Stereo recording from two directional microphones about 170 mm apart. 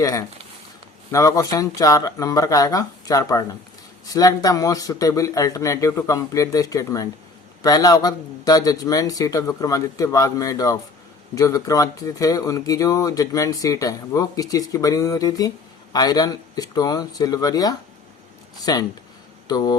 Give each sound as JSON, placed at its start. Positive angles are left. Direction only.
{"t": 0.0, "sound": "speech", "side_deg": 20}